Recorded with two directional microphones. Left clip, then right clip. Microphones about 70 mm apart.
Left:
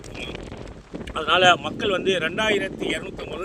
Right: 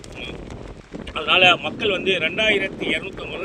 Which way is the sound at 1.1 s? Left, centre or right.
Left.